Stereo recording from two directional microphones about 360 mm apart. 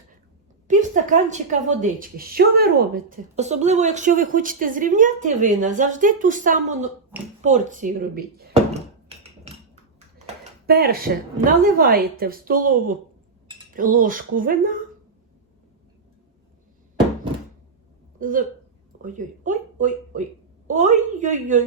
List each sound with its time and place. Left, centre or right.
0.7 s a woman's voice: right
7.4 s a sound: right
11.6 s a woman's voice: right
13.7 s a woman's voice: right
18.2 s a woman's voice: right